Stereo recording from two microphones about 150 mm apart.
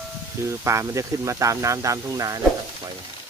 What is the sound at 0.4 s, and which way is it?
Speech, 20° right (ahead or behind).